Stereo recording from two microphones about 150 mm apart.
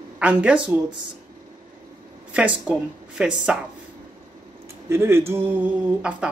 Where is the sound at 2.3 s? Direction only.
10° right (ahead or behind).